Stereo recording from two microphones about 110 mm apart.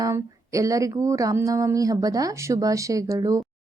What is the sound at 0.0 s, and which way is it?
A woman's voice, 30° right (ahead or behind).